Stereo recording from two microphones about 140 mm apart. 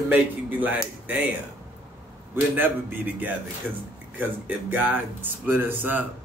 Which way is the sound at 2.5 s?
15° right (ahead or behind).